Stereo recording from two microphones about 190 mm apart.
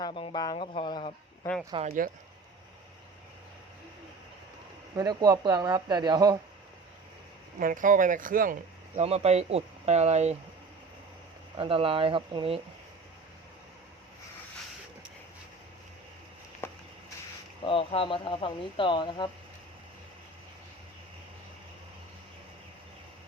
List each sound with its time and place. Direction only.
0.0 s speech: 25° left (ahead or behind)
1.7 s speech: 25° right (ahead or behind)
4.9 s speech: 20° right (ahead or behind)
7.6 s speech: 45° right (ahead or behind)
9.0 s speech: 35° right (ahead or behind)
11.5 s speech: 30° right (ahead or behind)
16.6 s a sound: 10° left (ahead or behind)
17.6 s speech: 30° left (ahead or behind)